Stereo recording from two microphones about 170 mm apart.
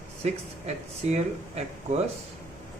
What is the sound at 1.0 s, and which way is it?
Speech, 40° right (ahead or behind).